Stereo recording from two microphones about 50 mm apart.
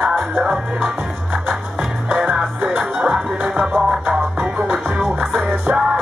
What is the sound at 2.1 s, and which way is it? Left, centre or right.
Music, centre.